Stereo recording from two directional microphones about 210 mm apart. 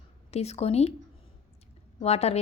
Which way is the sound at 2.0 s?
30° left (ahead or behind).